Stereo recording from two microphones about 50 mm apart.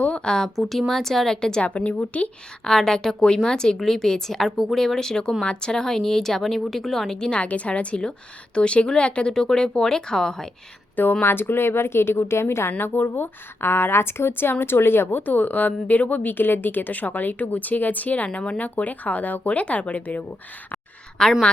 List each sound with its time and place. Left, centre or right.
0.0 s speech: centre
0.6 s speech: centre
1.6 s a woman's voice: left
2.6 s speech: centre
7.1 s a woman's voice: centre
11.2 s a woman's voice: left
12.7 s a woman's voice: left
15.2 s speech: left
21.2 s speech: centre